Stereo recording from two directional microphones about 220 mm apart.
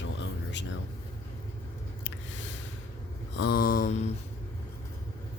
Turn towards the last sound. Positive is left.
turn(degrees=35)  # may be behind; listen again after turning